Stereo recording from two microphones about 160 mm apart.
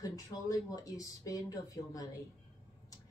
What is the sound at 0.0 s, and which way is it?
Speech, 20° left (ahead or behind).